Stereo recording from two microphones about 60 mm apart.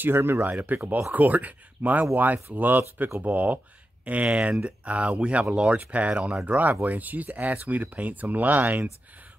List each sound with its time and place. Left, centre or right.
0.0 s speech: right